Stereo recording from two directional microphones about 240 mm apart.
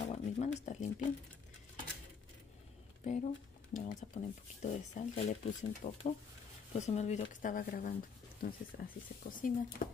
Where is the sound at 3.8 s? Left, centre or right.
Left.